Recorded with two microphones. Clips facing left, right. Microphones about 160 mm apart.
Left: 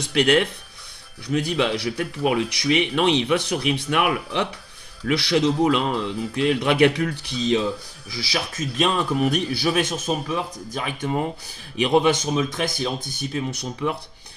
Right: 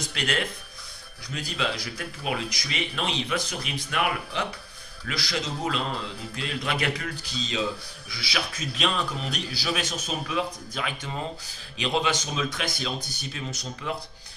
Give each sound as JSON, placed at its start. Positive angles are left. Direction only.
{"t": 0.1, "sound": "speech", "side_deg": 60}
{"t": 8.2, "sound": "speech", "side_deg": 45}